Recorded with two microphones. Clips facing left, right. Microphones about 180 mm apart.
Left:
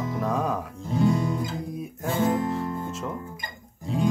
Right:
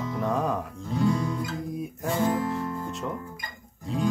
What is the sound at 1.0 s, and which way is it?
Music, 25° left (ahead or behind).